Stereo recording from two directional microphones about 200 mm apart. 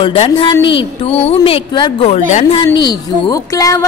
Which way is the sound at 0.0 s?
25° left (ahead or behind).